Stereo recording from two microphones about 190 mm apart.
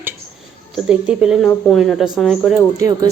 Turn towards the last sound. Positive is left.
turn(degrees=-20)  # may be behind; listen again after turning